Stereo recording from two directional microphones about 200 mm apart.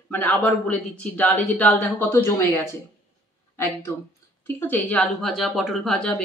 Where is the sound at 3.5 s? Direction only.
10° left (ahead or behind).